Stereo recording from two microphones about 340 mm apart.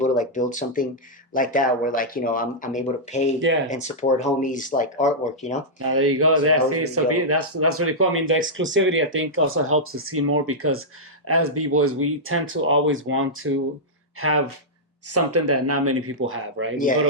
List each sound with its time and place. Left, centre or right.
0.0 s speech: left
5.9 s speech: right
16.7 s speech: left